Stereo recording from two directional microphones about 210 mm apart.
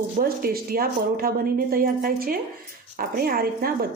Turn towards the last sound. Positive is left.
turn(degrees=-45)  # may be behind; listen again after turning